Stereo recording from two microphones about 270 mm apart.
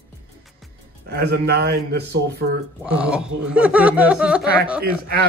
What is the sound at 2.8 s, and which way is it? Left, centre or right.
Speech, centre.